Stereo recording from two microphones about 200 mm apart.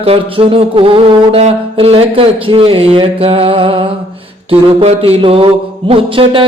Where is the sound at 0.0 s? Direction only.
30° right (ahead or behind).